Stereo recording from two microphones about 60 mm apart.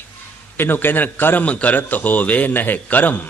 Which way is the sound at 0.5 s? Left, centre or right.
Left.